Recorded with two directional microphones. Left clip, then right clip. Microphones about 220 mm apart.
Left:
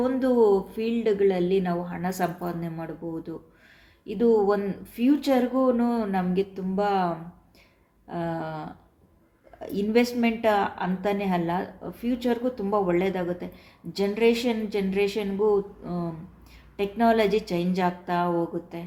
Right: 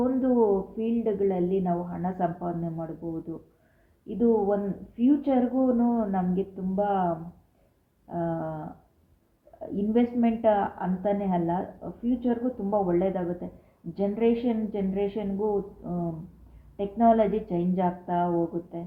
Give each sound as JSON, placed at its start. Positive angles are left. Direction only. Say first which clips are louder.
{"t": 0.0, "sound": "speech", "louder": "left 3 dB", "side_deg": 20}
{"t": 4.2, "sound": "speech", "louder": "left 3 dB", "side_deg": 20}
{"t": 8.1, "sound": "speech", "louder": "even", "side_deg": 20}
{"t": 9.7, "sound": "a woman's voice", "louder": "left 3 dB", "side_deg": 15}
{"t": 16.7, "sound": "a woman's voice", "louder": "even", "side_deg": 15}